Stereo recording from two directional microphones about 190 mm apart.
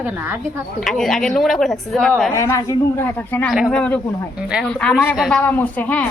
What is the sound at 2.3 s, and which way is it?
A woman's voice, 15° left (ahead or behind).